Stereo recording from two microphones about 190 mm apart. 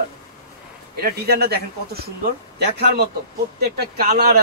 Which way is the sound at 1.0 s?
55° right (ahead or behind).